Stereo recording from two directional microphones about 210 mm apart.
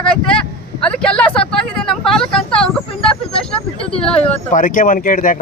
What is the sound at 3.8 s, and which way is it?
Speech, 25° left (ahead or behind).